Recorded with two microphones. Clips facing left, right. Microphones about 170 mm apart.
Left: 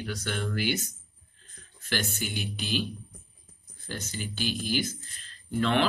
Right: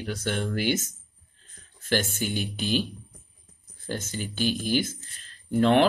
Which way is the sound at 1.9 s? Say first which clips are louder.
Right 5 dB; 50° right (ahead or behind).